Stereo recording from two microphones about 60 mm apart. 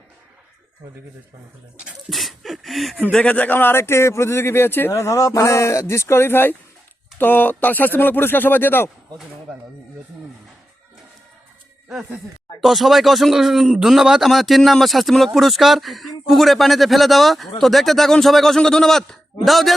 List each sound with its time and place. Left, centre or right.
2.0 s speech: centre
3.1 s a man's voice: left
3.5 s speech: left
12.6 s speech: centre